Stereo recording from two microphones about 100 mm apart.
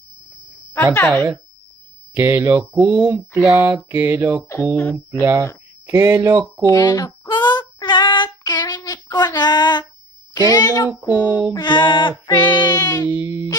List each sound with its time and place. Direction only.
0.9 s speech: 20° left (ahead or behind)
2.1 s speech: 20° right (ahead or behind)
6.6 s child singing: 40° left (ahead or behind)
10.3 s speech: 40° left (ahead or behind)
11.1 s female singing: 45° left (ahead or behind)
13.1 s speech: 25° right (ahead or behind)